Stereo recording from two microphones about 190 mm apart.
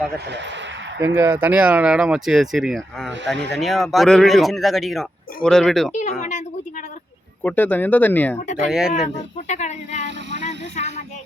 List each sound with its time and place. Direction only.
1.0 s a man's voice: 15° right (ahead or behind)
3.3 s speech: 65° right (ahead or behind)
3.6 s a man's voice: centre (ahead or behind)
5.9 s speech: 40° left (ahead or behind)
7.4 s speech: 10° left (ahead or behind)
8.4 s speech: 35° left (ahead or behind)
8.7 s a man's voice: centre (ahead or behind)
9.1 s speech: 35° left (ahead or behind)